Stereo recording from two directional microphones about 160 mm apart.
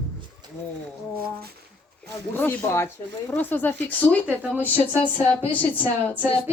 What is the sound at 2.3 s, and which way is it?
Speech, 15° left (ahead or behind).